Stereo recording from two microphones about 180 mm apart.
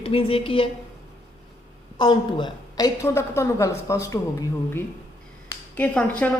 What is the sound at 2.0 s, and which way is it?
A woman's voice, 25° left (ahead or behind).